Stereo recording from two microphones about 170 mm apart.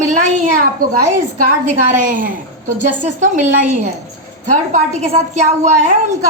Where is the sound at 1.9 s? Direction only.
50° right (ahead or behind).